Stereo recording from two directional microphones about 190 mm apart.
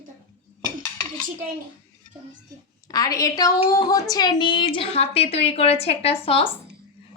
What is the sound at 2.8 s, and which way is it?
A woman's voice, 20° left (ahead or behind).